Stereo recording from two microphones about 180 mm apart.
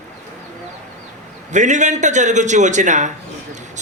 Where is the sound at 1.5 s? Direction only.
40° right (ahead or behind).